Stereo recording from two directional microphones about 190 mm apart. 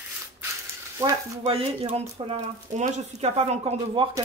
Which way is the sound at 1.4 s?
30° right (ahead or behind).